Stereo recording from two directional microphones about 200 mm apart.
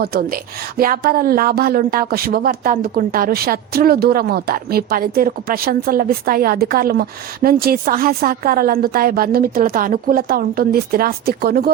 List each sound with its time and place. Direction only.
0.0 s speech: 50° right (ahead or behind)